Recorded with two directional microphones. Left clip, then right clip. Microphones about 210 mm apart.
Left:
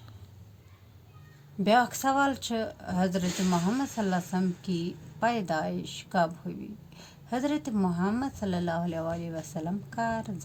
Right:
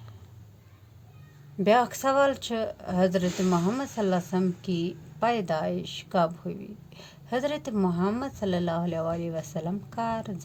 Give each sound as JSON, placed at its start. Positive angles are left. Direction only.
{"t": 1.6, "sound": "speech", "side_deg": -50}